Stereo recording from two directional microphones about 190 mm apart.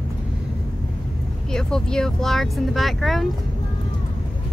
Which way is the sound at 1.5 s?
5° left (ahead or behind).